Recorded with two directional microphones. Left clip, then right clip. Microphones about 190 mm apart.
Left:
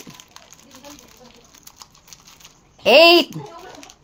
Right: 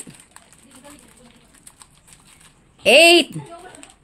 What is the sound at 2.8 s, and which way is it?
Speech, 15° right (ahead or behind).